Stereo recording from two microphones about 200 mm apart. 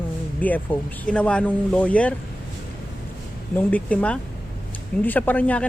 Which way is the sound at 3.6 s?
5° left (ahead or behind).